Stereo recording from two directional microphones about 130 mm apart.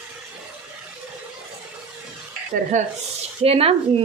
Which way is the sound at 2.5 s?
90° right.